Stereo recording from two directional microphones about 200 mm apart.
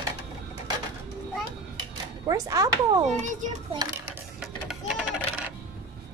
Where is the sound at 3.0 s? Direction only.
40° right (ahead or behind).